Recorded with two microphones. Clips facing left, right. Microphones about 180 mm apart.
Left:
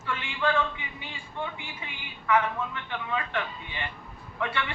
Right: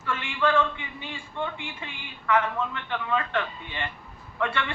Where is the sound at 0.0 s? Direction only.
20° left (ahead or behind).